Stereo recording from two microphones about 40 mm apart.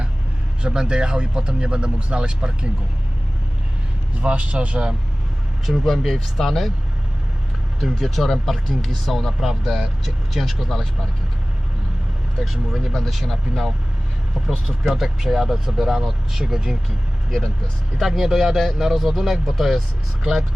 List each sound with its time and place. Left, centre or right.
0.7 s speech: centre
4.2 s speech: right
5.8 s speech: centre
7.8 s speech: centre
12.4 s speech: centre
14.4 s speech: centre
17.9 s speech: centre